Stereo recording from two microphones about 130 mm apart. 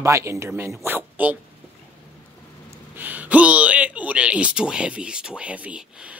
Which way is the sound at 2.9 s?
15° right (ahead or behind).